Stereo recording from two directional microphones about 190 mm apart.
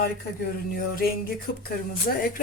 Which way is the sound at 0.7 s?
50° left (ahead or behind).